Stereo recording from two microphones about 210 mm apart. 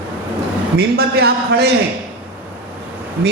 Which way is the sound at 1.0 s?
50° right (ahead or behind).